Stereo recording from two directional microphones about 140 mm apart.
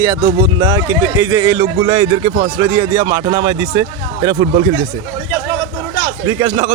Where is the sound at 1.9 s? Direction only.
25° right (ahead or behind).